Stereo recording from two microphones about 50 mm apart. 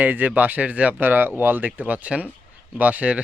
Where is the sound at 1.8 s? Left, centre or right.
Right.